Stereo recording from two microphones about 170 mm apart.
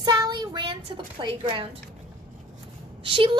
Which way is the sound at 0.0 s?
25° right (ahead or behind).